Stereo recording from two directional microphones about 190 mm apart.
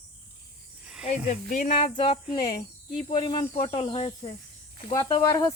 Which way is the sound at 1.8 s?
30° left (ahead or behind).